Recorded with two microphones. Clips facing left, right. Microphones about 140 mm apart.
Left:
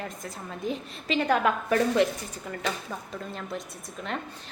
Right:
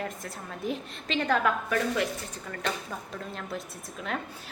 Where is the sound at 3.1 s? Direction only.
Centre (ahead or behind).